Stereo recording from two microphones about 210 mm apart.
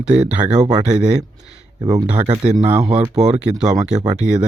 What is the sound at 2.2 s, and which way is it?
Speech, 30° right (ahead or behind).